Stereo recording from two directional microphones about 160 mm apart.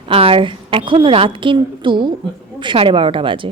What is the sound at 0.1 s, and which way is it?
A woman's voice, 35° right (ahead or behind).